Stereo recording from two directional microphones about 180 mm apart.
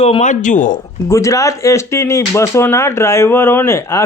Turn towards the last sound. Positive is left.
turn(degrees=15)  # may be behind; listen again after turning